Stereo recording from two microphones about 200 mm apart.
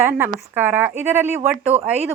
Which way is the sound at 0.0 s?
10° right (ahead or behind).